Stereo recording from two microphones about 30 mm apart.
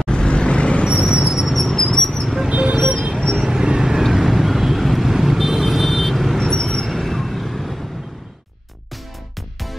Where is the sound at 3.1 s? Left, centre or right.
Centre.